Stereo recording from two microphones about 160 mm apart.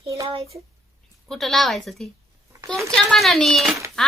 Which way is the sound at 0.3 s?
40° right (ahead or behind).